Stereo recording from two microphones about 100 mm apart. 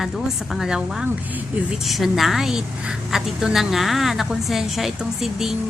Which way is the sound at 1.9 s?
Centre (ahead or behind).